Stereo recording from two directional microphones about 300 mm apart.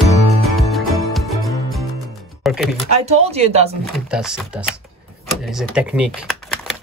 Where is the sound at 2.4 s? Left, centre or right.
Centre.